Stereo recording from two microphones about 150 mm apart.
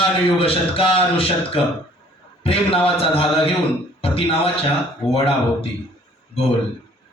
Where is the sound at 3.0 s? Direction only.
40° left (ahead or behind).